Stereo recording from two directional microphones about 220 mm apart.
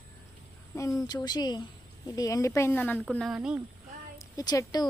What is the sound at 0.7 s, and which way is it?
Speech, 15° left (ahead or behind).